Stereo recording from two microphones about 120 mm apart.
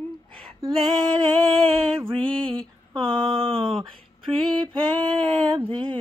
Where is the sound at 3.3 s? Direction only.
50° right (ahead or behind).